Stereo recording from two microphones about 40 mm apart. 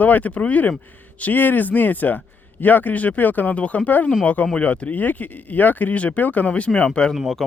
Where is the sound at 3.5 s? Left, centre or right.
Left.